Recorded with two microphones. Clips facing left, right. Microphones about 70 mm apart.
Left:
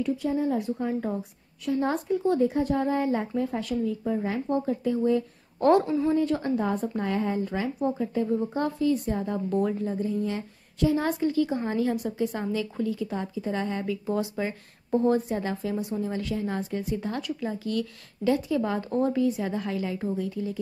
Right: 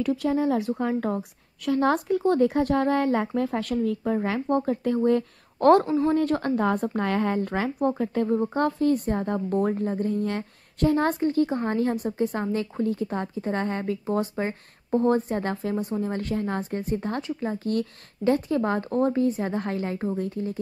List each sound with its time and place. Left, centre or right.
0.0 s a woman's voice: right